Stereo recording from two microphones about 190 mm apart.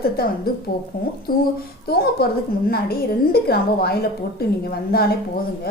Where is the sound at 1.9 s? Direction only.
55° left (ahead or behind).